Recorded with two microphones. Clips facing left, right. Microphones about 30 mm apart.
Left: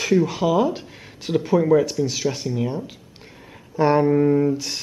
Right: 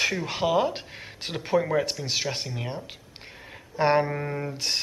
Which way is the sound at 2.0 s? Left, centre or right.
Right.